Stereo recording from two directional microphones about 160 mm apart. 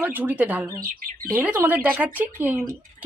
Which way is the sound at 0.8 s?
65° right (ahead or behind).